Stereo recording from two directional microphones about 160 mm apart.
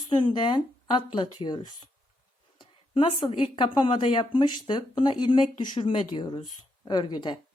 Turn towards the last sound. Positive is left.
turn(degrees=30)  # may be behind; listen again after turning